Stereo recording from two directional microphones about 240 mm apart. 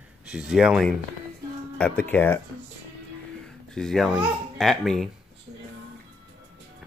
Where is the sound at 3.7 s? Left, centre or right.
Centre.